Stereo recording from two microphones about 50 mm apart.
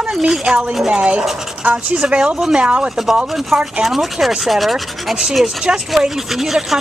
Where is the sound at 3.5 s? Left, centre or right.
Centre.